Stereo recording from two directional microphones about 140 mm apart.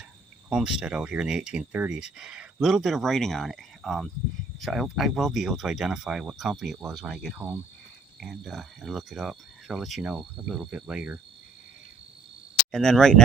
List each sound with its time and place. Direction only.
0.5 s cricket: 5° right (ahead or behind)
7.3 s speech: 15° right (ahead or behind)
8.2 s cricket: centre (ahead or behind)
12.7 s cricket: 5° left (ahead or behind)